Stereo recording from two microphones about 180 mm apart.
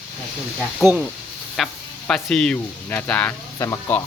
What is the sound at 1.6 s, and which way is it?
Speech, centre (ahead or behind).